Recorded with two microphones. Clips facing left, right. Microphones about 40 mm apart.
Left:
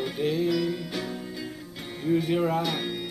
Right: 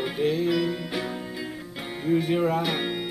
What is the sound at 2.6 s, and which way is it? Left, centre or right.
Music, centre.